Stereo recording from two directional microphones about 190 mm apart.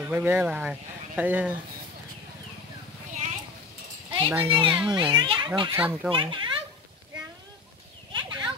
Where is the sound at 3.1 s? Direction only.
35° right (ahead or behind).